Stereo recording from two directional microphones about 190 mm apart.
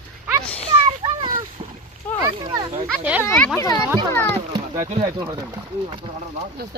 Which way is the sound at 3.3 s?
10° left (ahead or behind).